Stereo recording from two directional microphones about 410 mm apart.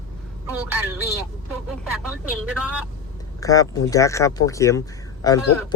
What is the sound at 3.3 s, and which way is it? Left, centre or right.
Speech, centre.